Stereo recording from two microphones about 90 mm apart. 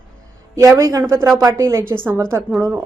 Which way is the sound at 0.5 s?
35° right (ahead or behind).